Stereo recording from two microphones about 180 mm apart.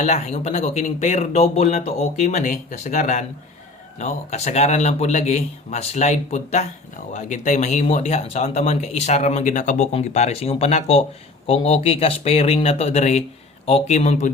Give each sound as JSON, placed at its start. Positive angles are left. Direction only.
{"t": 0.0, "sound": "speech", "side_deg": 35}